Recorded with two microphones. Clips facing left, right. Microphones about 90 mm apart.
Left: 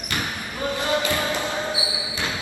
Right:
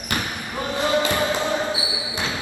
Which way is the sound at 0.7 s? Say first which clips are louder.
Right 4 dB; 20° right (ahead or behind).